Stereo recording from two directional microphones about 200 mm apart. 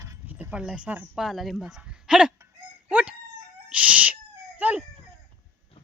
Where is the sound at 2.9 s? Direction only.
5° right (ahead or behind).